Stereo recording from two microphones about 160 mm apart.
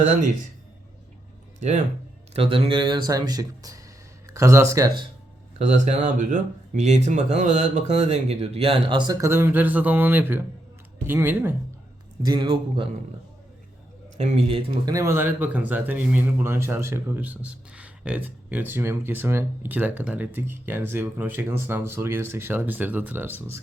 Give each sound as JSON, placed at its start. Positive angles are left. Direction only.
{"t": 1.5, "sound": "speech", "side_deg": -50}
{"t": 2.3, "sound": "speech", "side_deg": -35}
{"t": 5.5, "sound": "speech", "side_deg": -50}
{"t": 9.2, "sound": "speech", "side_deg": -15}
{"t": 12.2, "sound": "speech", "side_deg": -30}
{"t": 14.2, "sound": "speech", "side_deg": -40}
{"t": 14.8, "sound": "speech", "side_deg": -20}